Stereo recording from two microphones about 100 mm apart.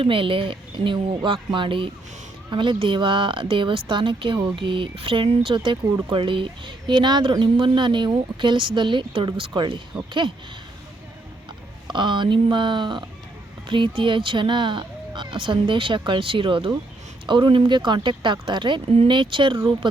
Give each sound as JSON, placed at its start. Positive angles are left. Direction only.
{"t": 0.0, "sound": "speech", "side_deg": -60}
{"t": 11.9, "sound": "speech", "side_deg": -50}